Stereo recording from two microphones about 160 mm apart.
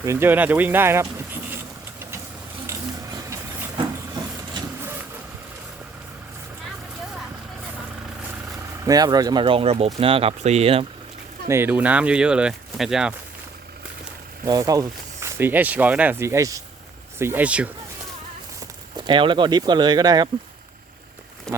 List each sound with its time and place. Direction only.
0.0 s speech: 15° right (ahead or behind)
2.6 s vehicle: 20° right (ahead or behind)
8.8 s speech: 25° right (ahead or behind)
11.4 s speech: 15° right (ahead or behind)
14.4 s speech: 20° right (ahead or behind)
18.9 s speech: 30° right (ahead or behind)